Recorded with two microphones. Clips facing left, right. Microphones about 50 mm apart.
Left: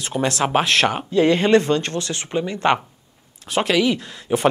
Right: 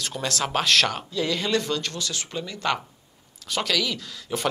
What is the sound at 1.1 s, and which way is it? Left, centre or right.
Speech, left.